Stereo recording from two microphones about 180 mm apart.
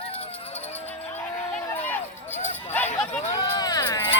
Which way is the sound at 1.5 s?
10° left (ahead or behind).